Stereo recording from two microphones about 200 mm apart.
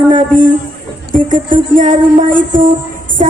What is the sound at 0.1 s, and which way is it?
Speech, 40° right (ahead or behind).